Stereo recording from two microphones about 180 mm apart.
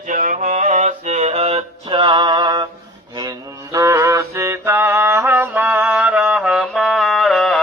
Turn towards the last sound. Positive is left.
turn(degrees=0)  # may be behind; listen again after turning